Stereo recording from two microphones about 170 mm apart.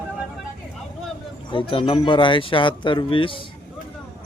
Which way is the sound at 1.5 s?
30° left (ahead or behind).